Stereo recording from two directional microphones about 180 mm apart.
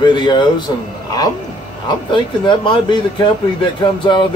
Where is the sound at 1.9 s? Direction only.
25° left (ahead or behind).